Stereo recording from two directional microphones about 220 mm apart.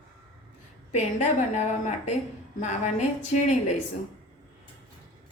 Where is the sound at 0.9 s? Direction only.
30° left (ahead or behind).